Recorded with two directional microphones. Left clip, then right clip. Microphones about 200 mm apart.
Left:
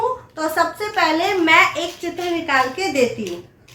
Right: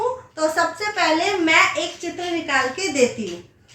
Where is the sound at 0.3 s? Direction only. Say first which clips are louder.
Even; 15° right (ahead or behind).